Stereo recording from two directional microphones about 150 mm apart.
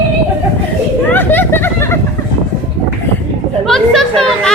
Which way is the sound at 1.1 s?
15° left (ahead or behind).